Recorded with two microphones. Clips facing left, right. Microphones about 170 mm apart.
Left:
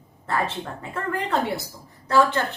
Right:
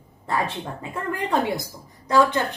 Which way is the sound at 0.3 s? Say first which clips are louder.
Even; 15° right (ahead or behind).